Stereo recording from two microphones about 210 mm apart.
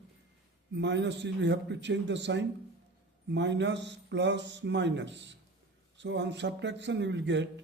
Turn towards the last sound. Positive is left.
turn(degrees=-55)  # may be behind; listen again after turning